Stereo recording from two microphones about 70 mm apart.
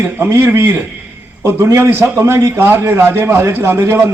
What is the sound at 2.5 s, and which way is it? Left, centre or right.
A man's voice, right.